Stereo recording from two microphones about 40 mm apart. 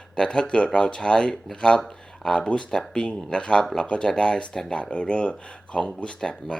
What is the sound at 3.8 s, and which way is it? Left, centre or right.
Speech, left.